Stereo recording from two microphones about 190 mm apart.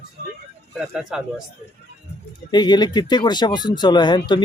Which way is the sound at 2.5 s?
20° left (ahead or behind).